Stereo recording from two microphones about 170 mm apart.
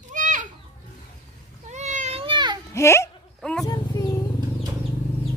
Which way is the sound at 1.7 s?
45° right (ahead or behind).